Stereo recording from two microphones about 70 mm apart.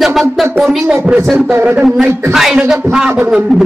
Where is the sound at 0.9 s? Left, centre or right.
Centre.